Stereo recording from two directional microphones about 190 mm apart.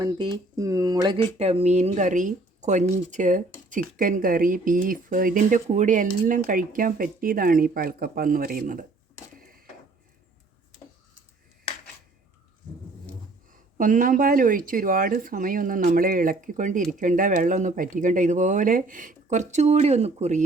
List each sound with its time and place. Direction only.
0.0 s speech: 20° right (ahead or behind)
1.4 s speech: 35° right (ahead or behind)
9.4 s mechanisms: 50° right (ahead or behind)
13.5 s speech: 45° right (ahead or behind)